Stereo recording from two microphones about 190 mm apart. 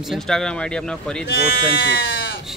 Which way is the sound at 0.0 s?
Centre (ahead or behind).